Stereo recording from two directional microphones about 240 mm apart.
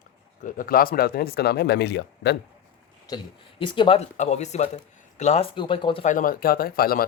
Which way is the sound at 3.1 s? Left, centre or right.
Left.